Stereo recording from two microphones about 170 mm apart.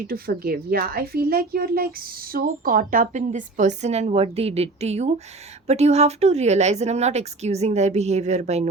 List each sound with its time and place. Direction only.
0.0 s a woman's voice: 60° right (ahead or behind); by 8.6 s 40° right (ahead or behind)